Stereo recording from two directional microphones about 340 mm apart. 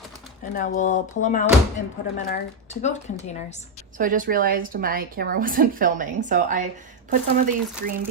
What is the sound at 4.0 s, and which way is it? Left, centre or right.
Speech, right.